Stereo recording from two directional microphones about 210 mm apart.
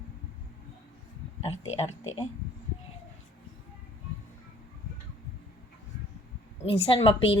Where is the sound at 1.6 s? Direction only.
75° left (ahead or behind).